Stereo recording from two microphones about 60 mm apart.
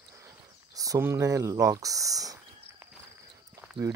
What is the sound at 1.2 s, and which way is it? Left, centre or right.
Speech, right.